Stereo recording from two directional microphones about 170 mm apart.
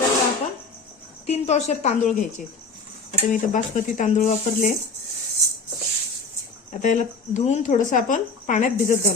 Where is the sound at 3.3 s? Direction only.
50° left (ahead or behind).